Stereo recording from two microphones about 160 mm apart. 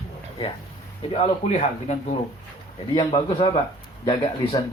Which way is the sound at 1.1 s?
40° left (ahead or behind).